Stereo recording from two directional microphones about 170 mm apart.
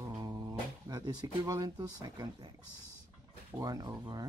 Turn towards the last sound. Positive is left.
turn(degrees=-20)  # may be behind; listen again after turning